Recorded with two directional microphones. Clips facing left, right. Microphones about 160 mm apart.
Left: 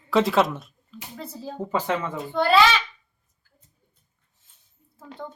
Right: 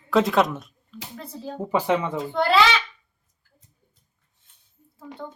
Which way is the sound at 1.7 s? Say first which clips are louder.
Right 4 dB; 15° right (ahead or behind).